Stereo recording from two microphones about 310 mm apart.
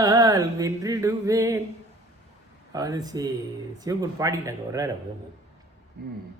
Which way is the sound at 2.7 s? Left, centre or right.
Centre.